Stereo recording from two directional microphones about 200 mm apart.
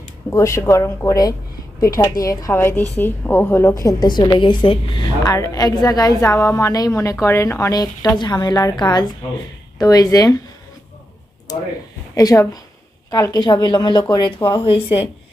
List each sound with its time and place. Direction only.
0.3 s a woman's voice: 15° left (ahead or behind)
11.5 s a woman's voice: 20° left (ahead or behind)